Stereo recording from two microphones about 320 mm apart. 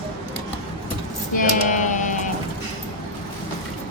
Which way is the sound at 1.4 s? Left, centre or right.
Left.